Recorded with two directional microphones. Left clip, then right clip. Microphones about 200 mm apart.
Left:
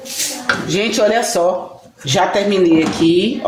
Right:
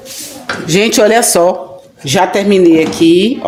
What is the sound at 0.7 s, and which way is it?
Speech, 55° right (ahead or behind).